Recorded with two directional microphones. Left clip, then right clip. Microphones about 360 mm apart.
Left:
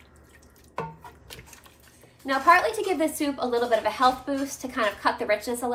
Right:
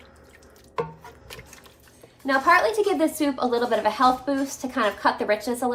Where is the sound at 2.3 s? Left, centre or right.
Centre.